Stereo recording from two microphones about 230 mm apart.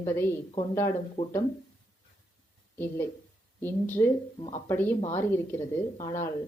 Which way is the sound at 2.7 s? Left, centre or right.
Centre.